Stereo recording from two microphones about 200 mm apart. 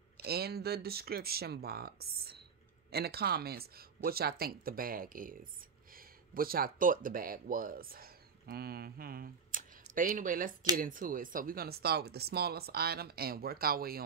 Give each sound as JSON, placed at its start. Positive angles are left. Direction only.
{"t": 0.2, "sound": "speech", "side_deg": -50}